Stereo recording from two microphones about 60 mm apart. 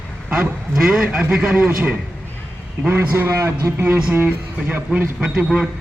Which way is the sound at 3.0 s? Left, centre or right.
Right.